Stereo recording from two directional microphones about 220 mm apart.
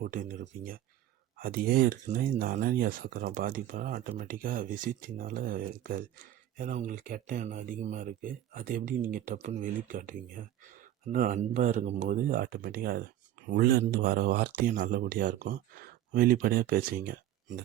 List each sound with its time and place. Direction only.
0.0 s speech: 40° right (ahead or behind)